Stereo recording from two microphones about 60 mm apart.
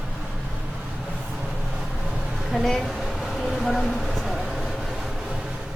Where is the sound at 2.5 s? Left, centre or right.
Centre.